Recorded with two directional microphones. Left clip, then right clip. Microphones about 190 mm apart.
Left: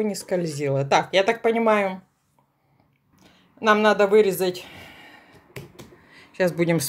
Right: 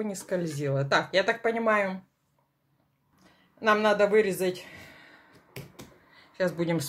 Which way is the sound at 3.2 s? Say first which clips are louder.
Left 6 dB; 25° left (ahead or behind).